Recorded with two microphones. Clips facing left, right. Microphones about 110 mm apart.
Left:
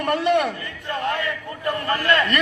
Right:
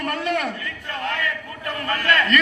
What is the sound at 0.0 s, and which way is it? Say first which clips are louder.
Speech: left 5 dB; 20° left (ahead or behind).